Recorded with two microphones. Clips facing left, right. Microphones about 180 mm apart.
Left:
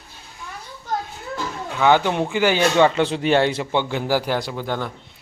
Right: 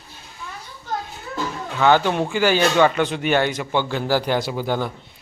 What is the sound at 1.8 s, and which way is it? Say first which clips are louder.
A man's voice: even; 15° left (ahead or behind).